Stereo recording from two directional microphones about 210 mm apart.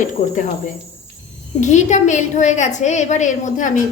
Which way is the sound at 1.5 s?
35° left (ahead or behind).